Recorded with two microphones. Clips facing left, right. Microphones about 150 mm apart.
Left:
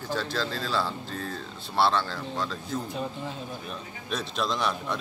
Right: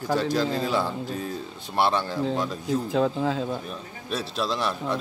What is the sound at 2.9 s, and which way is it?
Speech, 90° right.